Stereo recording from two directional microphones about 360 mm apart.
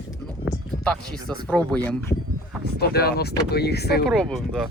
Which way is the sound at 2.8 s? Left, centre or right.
Left.